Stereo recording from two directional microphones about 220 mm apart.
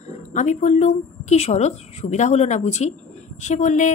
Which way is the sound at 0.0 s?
35° left (ahead or behind).